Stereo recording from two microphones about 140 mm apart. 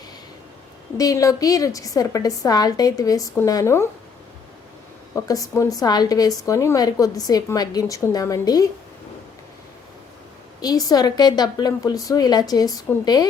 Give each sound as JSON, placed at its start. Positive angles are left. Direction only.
{"t": 0.9, "sound": "a woman's voice", "side_deg": 25}
{"t": 5.1, "sound": "a woman's voice", "side_deg": 25}
{"t": 10.6, "sound": "a woman's voice", "side_deg": 25}